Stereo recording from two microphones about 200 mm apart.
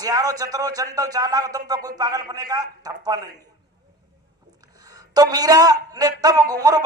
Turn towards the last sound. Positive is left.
turn(degrees=-20)  # may be behind; listen again after turning